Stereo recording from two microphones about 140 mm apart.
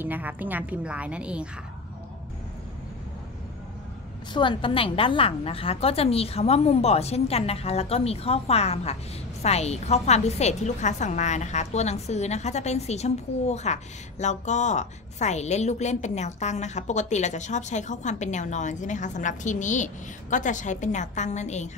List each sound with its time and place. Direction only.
0.0 s a woman's voice: 10° right (ahead or behind)
4.3 s a woman's voice: 35° left (ahead or behind); by 21.6 s 55° left (ahead or behind)